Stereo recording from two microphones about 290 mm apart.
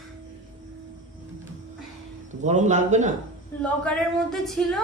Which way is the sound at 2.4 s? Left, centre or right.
Right.